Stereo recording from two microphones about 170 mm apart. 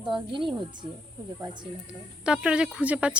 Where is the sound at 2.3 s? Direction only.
5° right (ahead or behind).